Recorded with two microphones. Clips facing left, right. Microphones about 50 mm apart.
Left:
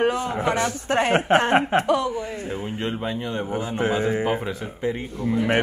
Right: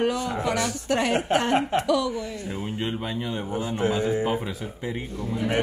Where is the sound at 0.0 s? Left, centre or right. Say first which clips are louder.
Left 3 dB; left.